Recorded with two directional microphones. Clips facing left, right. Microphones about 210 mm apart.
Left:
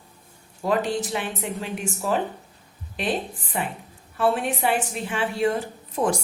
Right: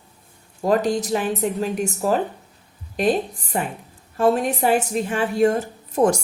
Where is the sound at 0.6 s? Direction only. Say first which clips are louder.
Right 4 dB; 40° right (ahead or behind).